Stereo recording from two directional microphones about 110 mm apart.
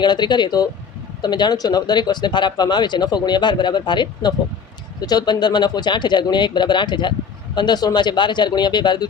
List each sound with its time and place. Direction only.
0.0 s speech: 40° left (ahead or behind)